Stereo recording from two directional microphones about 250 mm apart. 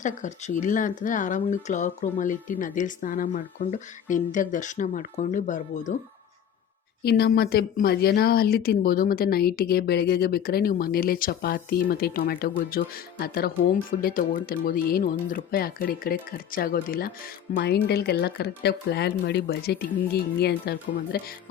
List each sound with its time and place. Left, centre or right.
0.0 s speech: left
7.0 s speech: left